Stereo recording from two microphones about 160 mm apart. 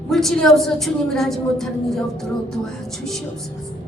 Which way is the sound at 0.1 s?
Centre (ahead or behind).